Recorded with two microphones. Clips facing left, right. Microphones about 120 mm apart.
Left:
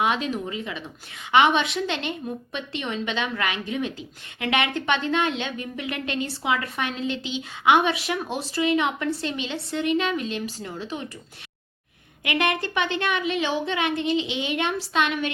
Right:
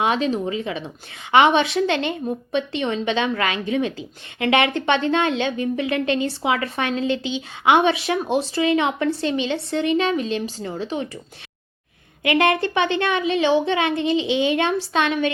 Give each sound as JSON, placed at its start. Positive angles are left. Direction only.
{"t": 0.0, "sound": "a woman's voice", "side_deg": -30}
{"t": 12.2, "sound": "a woman's voice", "side_deg": -25}